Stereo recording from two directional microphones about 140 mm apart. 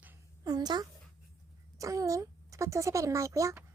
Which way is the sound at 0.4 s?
30° right (ahead or behind).